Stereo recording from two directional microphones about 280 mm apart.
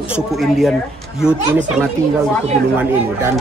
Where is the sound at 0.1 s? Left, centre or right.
Centre.